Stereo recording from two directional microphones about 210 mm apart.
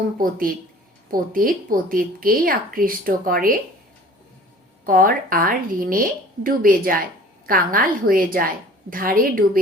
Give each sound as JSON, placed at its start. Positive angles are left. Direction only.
{"t": 0.2, "sound": "a woman's voice", "side_deg": -40}
{"t": 4.9, "sound": "a woman's voice", "side_deg": -45}